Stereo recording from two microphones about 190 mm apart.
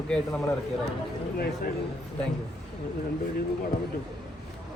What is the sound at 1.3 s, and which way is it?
Speech, 50° left (ahead or behind).